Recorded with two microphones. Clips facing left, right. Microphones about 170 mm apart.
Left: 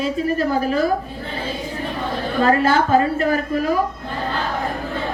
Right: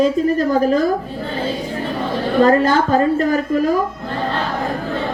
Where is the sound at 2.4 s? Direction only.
40° right (ahead or behind).